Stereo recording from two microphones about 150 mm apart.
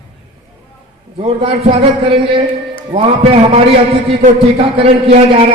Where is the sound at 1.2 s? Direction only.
35° right (ahead or behind).